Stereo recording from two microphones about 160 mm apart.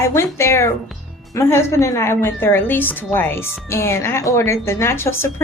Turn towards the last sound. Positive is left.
turn(degrees=15)  # may be behind; listen again after turning